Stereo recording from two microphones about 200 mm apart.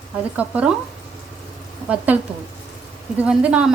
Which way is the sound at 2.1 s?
10° right (ahead or behind).